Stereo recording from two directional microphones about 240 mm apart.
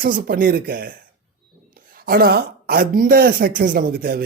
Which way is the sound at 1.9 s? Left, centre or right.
Right.